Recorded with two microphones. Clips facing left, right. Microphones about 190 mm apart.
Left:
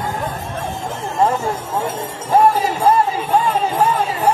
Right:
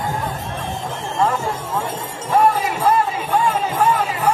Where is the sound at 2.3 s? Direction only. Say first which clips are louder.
Left 2 dB; 30° left (ahead or behind).